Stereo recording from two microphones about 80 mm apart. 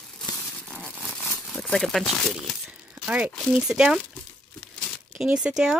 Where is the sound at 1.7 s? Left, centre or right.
Centre.